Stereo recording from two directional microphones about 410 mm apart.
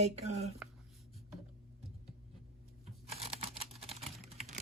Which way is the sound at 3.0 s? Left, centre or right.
Centre.